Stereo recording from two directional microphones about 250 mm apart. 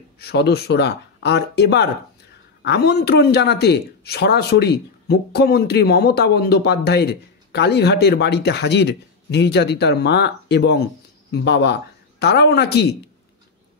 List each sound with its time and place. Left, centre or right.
0.2 s speech: left